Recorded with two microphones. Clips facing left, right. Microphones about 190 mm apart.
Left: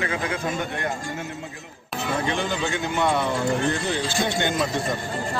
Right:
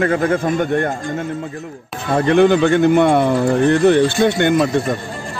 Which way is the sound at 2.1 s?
60° right (ahead or behind).